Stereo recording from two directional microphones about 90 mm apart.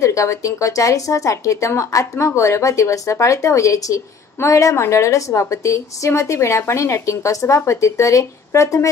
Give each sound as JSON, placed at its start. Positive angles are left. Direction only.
{"t": 0.0, "sound": "speech", "side_deg": 35}